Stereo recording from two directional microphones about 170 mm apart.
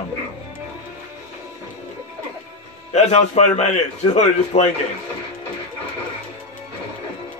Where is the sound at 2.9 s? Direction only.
40° left (ahead or behind).